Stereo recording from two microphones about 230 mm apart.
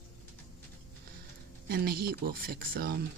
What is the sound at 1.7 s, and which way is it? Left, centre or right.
Speech, right.